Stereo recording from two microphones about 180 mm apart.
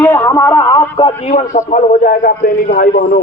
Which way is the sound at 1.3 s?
40° left (ahead or behind).